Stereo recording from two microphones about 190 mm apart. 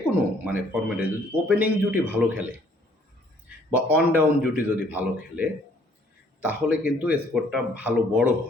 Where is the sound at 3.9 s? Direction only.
10° right (ahead or behind).